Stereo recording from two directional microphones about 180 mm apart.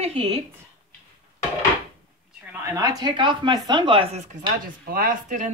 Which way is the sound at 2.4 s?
15° right (ahead or behind).